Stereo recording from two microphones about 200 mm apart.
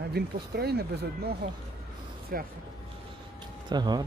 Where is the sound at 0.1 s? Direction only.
50° right (ahead or behind).